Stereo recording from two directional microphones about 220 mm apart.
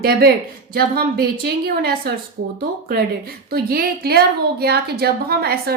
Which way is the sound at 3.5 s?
45° right (ahead or behind).